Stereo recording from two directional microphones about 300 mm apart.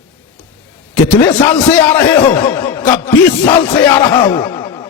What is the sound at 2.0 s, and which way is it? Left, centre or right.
Speech, centre.